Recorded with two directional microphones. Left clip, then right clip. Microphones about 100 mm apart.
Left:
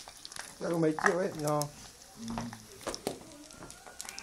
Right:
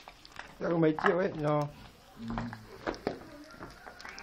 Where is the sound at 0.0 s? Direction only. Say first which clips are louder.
Left 2 dB; 20° left (ahead or behind).